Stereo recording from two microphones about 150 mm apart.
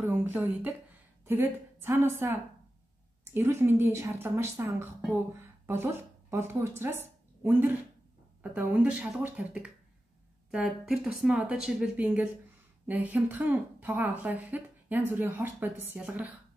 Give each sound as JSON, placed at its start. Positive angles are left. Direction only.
{"t": 0.1, "sound": "a woman's voice", "side_deg": -10}
{"t": 3.3, "sound": "a woman's voice", "side_deg": -15}